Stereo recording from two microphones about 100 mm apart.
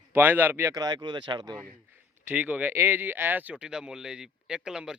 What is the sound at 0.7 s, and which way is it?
Speech, 40° right (ahead or behind).